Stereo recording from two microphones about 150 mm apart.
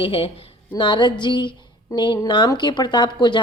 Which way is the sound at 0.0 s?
35° left (ahead or behind).